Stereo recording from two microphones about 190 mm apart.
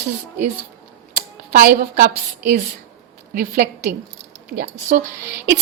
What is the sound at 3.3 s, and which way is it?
Speech, 50° right (ahead or behind).